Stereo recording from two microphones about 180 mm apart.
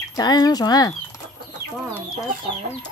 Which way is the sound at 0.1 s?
20° left (ahead or behind).